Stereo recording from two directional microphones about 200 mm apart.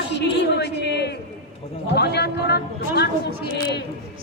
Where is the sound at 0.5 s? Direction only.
60° left (ahead or behind).